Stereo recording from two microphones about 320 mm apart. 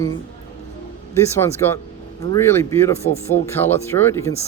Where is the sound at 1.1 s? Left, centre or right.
Centre.